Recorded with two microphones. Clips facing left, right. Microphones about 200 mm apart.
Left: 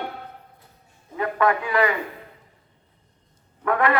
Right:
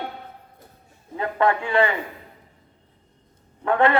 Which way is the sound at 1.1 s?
30° right (ahead or behind).